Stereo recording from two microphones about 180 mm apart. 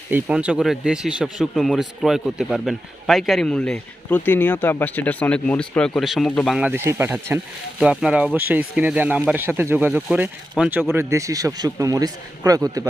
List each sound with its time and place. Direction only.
0.1 s speech: 10° right (ahead or behind)
6.6 s a man's voice: 10° right (ahead or behind)